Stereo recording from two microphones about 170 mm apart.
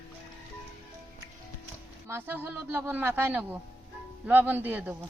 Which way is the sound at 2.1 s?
15° right (ahead or behind).